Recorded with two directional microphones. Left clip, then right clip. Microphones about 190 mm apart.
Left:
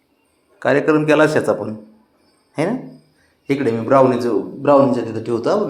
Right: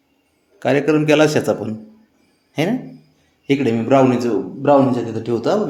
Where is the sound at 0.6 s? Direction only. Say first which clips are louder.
Left 1 dB; 25° right (ahead or behind).